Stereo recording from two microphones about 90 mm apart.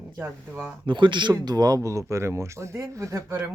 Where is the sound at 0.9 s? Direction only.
60° right (ahead or behind).